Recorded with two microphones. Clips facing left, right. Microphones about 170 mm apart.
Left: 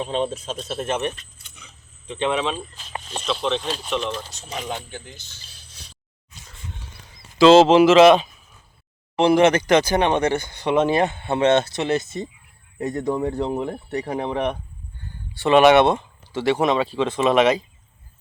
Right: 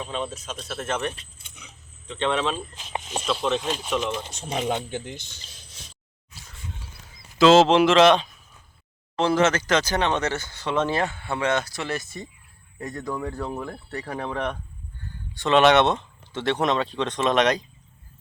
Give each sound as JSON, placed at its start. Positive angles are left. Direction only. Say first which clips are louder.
{"t": 0.0, "sound": "speech", "louder": "left 6 dB", "side_deg": 30}
{"t": 2.4, "sound": "speech", "louder": "left 1 dB", "side_deg": 0}
{"t": 2.7, "sound": "speech", "louder": "right 2 dB", "side_deg": -20}
{"t": 3.2, "sound": "speech", "louder": "left 1 dB", "side_deg": -5}
{"t": 4.5, "sound": "speech", "louder": "right 4 dB", "side_deg": -25}
{"t": 6.8, "sound": "a sound", "louder": "left 2 dB", "side_deg": -5}
{"t": 9.1, "sound": "speech", "louder": "left 5 dB", "side_deg": 15}